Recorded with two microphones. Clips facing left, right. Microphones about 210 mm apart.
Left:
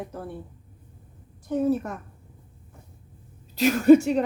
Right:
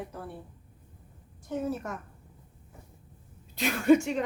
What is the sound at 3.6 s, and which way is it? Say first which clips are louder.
Speech: left 7 dB; 40° left (ahead or behind).